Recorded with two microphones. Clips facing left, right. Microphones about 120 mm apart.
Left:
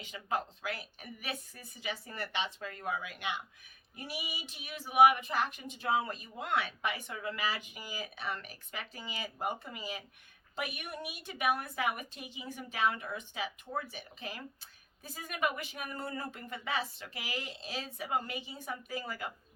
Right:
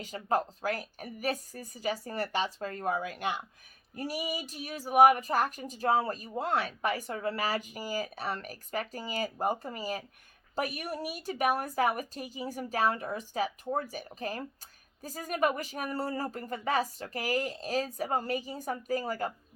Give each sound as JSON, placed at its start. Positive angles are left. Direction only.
{"t": 0.0, "sound": "speech", "side_deg": -40}